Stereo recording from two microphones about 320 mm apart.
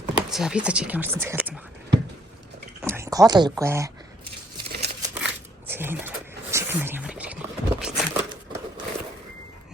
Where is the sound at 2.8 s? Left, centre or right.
Centre.